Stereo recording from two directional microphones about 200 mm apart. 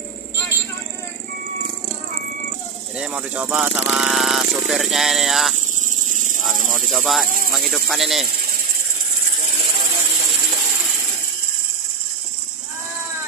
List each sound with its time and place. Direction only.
3.0 s speech: 5° right (ahead or behind)
5.9 s cricket: 40° right (ahead or behind)
6.4 s speech: centre (ahead or behind)
7.2 s speech: 45° left (ahead or behind)
7.5 s speech: centre (ahead or behind)